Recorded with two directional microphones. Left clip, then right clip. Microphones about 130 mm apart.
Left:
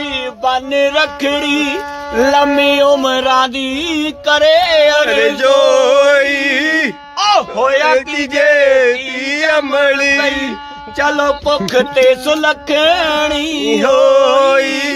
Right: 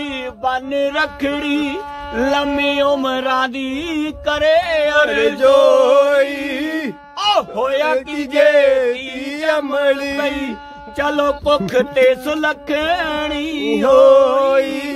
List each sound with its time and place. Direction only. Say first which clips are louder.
0.4 s music: left 5 dB; 5° left (ahead or behind); by 3.0 s 25° left (ahead or behind)
3.0 s music: left 5 dB; 5° left (ahead or behind)
7.2 s speech: left 4 dB; 65° right (ahead or behind)
8.2 s speech: right 1 dB; centre (ahead or behind)
11.0 s music: left 4 dB; 50° right (ahead or behind)
11.4 s music: left 2 dB; 25° right (ahead or behind)
11.9 s speech: left 3 dB; 15° right (ahead or behind)
12.3 s music: left 5 dB; centre (ahead or behind); by 13.7 s 15° left (ahead or behind)
13.7 s music: even; centre (ahead or behind)
14.5 s speech: left 4 dB; 5° right (ahead or behind)